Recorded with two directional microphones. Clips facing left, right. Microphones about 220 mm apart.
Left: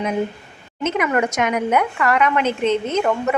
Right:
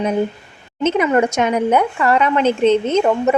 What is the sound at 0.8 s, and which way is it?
A woman's voice, 30° right (ahead or behind).